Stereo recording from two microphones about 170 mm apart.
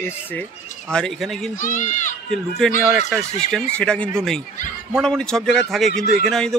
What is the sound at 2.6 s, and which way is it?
Speech, 5° left (ahead or behind).